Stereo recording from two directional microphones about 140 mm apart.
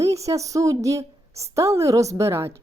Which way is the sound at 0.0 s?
20° right (ahead or behind).